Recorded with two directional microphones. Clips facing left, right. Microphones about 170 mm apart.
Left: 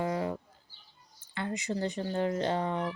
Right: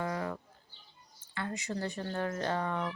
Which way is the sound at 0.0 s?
20° left (ahead or behind).